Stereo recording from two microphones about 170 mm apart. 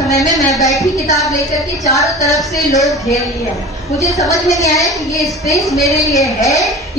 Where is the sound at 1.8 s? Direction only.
20° left (ahead or behind).